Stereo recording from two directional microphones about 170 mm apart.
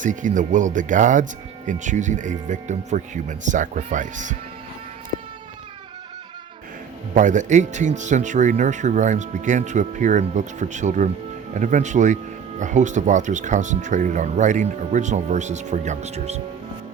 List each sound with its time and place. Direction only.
0.0 s speech: 50° right (ahead or behind)
7.1 s speech: 45° right (ahead or behind)